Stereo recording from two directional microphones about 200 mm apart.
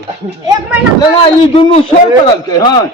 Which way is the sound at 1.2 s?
30° left (ahead or behind).